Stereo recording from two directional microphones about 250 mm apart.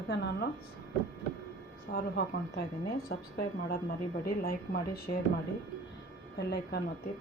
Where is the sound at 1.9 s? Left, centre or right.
Left.